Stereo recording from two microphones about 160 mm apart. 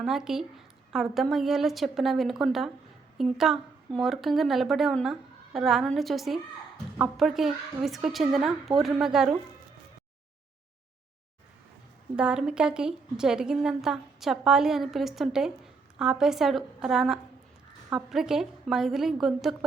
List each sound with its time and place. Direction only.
0.0 s a woman's voice: 5° right (ahead or behind)
12.1 s a woman's voice: 5° right (ahead or behind)